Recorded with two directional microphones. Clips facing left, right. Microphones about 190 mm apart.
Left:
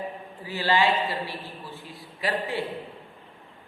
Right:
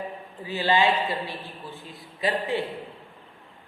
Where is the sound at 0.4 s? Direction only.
15° right (ahead or behind).